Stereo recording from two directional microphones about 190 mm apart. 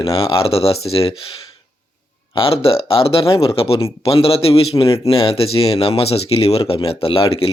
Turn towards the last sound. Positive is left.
turn(degrees=30)  # may be behind; listen again after turning